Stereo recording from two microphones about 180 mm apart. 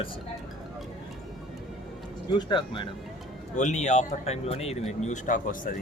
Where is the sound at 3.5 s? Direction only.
40° left (ahead or behind).